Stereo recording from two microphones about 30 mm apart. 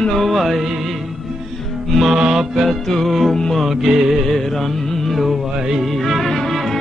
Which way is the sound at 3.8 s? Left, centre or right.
Centre.